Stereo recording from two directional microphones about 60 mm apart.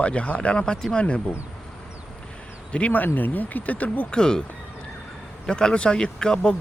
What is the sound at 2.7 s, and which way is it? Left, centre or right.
Speech, left.